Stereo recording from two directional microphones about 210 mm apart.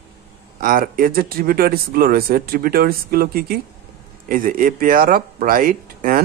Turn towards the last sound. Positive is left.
turn(degrees=-40)  # may be behind; listen again after turning